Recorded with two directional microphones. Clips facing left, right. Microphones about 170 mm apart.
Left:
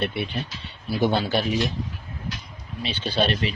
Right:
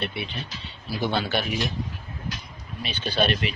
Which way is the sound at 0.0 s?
55° left (ahead or behind).